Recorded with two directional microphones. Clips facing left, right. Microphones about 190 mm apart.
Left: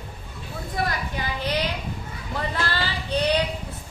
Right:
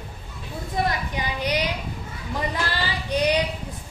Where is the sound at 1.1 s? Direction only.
15° right (ahead or behind).